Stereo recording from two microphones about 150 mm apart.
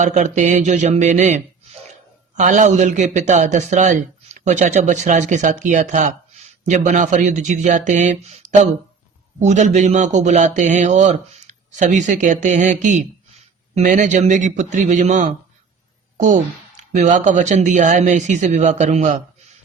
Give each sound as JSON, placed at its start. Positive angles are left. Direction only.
{"t": 0.0, "sound": "a man's voice", "side_deg": -55}